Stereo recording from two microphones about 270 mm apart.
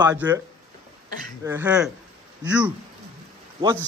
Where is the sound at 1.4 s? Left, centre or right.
Centre.